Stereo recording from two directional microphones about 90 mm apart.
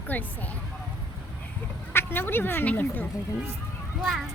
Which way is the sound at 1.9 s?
25° left (ahead or behind).